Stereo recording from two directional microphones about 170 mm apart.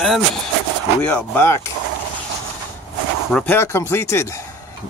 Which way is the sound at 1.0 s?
10° left (ahead or behind).